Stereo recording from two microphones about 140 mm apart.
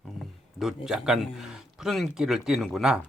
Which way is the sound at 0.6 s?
5° right (ahead or behind).